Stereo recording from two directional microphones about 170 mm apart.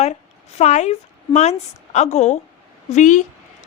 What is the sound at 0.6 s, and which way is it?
A woman's voice, 40° left (ahead or behind).